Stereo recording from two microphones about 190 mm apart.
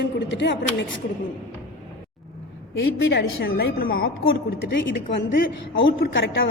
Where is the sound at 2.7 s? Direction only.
75° left (ahead or behind); by 4.1 s 50° left (ahead or behind).